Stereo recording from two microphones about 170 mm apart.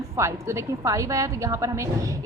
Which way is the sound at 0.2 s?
15° right (ahead or behind).